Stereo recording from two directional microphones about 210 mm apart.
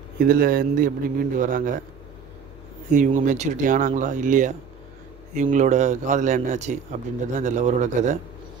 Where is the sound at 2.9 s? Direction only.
40° right (ahead or behind).